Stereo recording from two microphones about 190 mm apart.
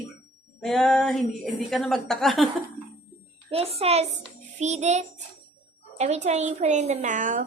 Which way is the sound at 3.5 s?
30° right (ahead or behind).